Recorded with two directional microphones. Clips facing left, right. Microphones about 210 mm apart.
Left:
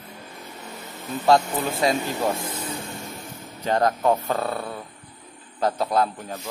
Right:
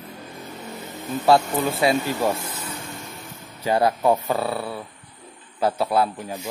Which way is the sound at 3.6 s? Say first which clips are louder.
Right 1 dB; 10° right (ahead or behind).